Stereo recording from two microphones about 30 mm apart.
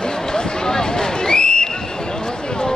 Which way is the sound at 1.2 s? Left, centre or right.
Left.